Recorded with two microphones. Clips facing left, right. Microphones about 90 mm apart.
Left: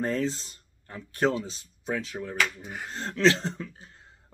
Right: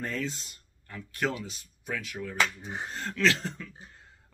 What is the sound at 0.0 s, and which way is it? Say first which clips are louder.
Speech: left 6 dB; 30° left (ahead or behind).